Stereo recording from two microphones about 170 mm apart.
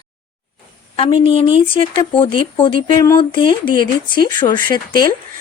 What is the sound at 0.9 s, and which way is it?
A woman's voice, 30° left (ahead or behind).